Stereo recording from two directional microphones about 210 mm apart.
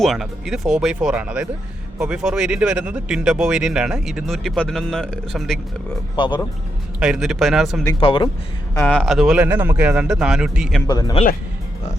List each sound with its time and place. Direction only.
0.0 s speech: centre (ahead or behind)
6.1 s speech: 25° left (ahead or behind)
7.0 s speech: 5° right (ahead or behind)
7.9 s speech: 25° left (ahead or behind)
8.7 s speech: 10° left (ahead or behind)
10.8 s speech: 20° left (ahead or behind)